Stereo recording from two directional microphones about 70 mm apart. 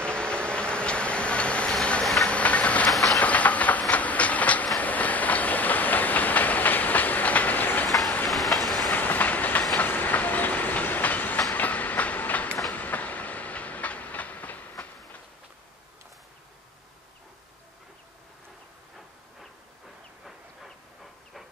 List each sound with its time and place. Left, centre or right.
0.0 s a sound: centre
2.2 s engine: centre
2.9 s train: centre
3.2 s train: left
8.3 s train: centre
8.9 s train: left